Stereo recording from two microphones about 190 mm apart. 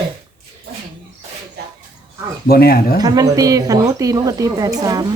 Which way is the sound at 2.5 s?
55° left (ahead or behind).